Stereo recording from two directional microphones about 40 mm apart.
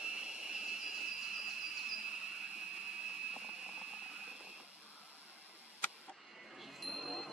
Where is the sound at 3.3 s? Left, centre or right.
Right.